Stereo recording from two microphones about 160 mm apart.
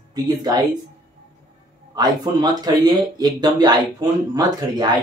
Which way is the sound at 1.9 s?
25° right (ahead or behind).